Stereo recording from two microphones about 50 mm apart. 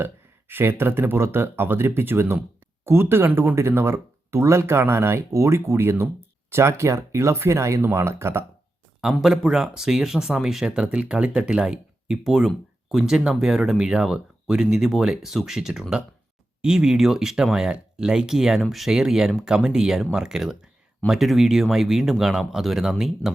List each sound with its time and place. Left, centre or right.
0.0 s speech: right
6.5 s speech: right
7.8 s speech: right
9.2 s speech: centre
18.9 s speech: centre